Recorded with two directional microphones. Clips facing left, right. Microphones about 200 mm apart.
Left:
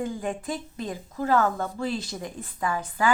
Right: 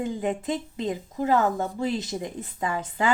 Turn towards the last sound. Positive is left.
turn(degrees=-25)  # may be behind; listen again after turning